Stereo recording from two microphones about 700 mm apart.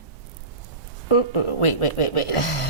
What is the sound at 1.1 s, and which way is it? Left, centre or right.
A woman's voice, left.